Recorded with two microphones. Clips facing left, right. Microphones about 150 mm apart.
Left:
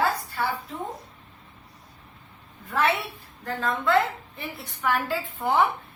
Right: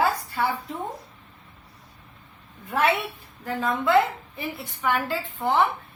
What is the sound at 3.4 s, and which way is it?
A woman's voice, 5° right (ahead or behind).